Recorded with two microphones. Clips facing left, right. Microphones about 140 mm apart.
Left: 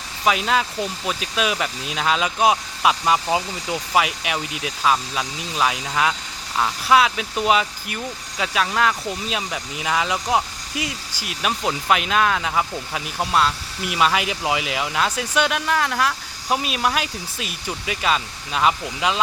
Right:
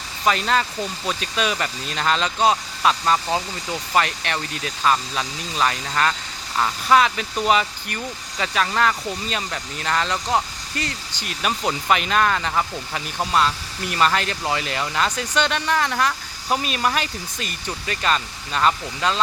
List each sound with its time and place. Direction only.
0.3 s speech: 5° left (ahead or behind)